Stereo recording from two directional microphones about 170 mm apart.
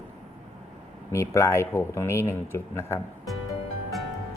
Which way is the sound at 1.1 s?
15° left (ahead or behind).